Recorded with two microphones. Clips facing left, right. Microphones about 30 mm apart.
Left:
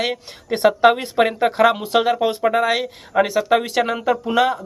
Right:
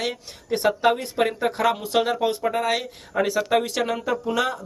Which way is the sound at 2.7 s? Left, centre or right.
Left.